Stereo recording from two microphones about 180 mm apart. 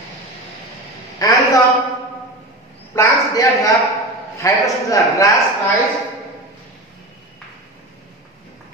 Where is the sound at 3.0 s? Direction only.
20° left (ahead or behind).